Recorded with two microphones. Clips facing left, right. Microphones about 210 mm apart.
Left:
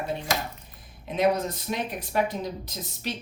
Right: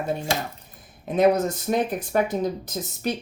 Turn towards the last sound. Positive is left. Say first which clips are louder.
# right 7 dB
turn(degrees=-50)  # may be behind; listen again after turning